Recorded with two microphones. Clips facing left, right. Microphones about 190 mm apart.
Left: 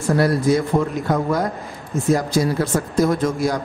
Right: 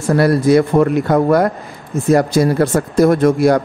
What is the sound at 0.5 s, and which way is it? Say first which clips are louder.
A man's voice: right 7 dB; 70° right (ahead or behind).